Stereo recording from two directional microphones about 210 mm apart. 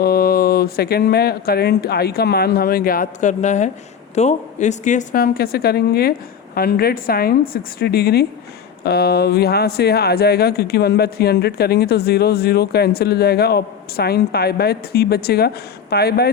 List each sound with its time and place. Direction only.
0.0 s speech: 45° left (ahead or behind)